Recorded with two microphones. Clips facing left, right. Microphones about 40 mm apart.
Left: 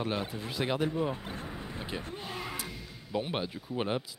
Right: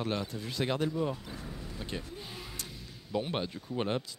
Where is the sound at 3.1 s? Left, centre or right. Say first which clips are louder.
Even; centre.